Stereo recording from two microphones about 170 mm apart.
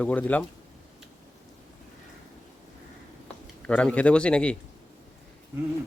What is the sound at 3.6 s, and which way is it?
Speech, 10° left (ahead or behind).